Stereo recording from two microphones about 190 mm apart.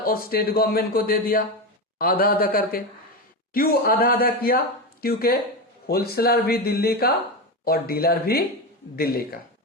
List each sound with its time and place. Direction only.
0.0 s a man's voice: 50° left (ahead or behind)